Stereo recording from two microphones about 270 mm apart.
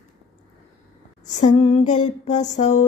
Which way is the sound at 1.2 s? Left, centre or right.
Left.